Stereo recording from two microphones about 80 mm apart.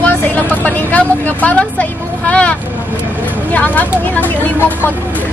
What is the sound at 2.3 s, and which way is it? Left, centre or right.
Vehicle, centre.